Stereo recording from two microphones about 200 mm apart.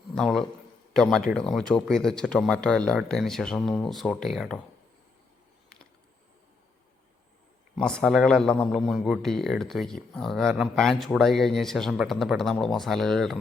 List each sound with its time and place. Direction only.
0.2 s a man's voice: centre (ahead or behind)
7.8 s a man's voice: 5° left (ahead or behind)